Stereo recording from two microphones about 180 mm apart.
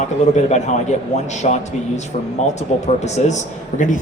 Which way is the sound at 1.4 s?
35° left (ahead or behind).